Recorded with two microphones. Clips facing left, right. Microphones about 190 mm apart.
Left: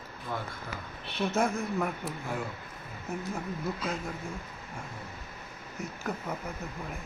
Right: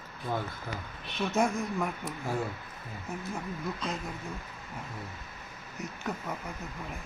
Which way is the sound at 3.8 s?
5° left (ahead or behind).